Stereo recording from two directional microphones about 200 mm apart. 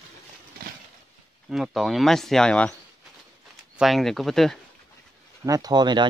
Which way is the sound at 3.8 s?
Centre (ahead or behind).